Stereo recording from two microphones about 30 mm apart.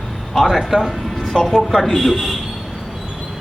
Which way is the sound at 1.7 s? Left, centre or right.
Centre.